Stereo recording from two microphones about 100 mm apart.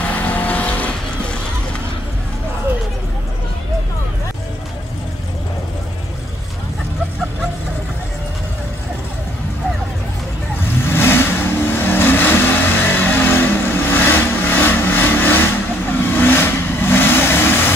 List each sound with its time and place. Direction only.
0.1 s vehicle: 15° left (ahead or behind)
10.8 s vehicle: 25° left (ahead or behind)